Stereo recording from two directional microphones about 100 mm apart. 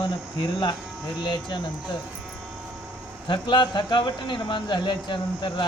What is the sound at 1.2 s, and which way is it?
Speech, 55° left (ahead or behind).